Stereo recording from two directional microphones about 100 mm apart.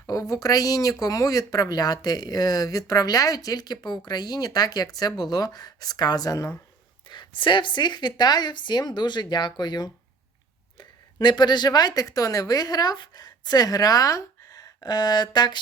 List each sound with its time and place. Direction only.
0.1 s speech: 35° left (ahead or behind)
7.1 s speech: 50° left (ahead or behind)